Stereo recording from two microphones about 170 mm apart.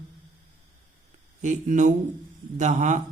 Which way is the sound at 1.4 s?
45° right (ahead or behind).